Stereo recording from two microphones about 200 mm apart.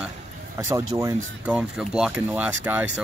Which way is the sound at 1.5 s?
5° right (ahead or behind).